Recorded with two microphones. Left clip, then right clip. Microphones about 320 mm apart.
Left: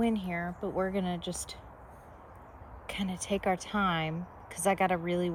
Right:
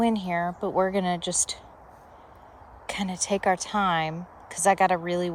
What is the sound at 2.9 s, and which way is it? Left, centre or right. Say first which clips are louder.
Speech: right 6 dB; centre.